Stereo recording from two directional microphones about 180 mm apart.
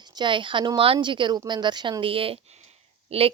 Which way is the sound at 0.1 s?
25° right (ahead or behind).